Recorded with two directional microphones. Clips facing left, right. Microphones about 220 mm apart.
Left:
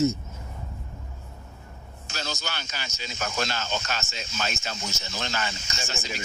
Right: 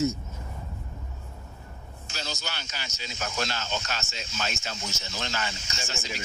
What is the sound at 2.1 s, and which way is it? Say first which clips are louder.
Speech: left 3 dB; 45° left (ahead or behind).